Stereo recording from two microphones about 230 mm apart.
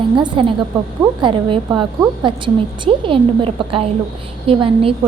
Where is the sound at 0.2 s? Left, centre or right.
Right.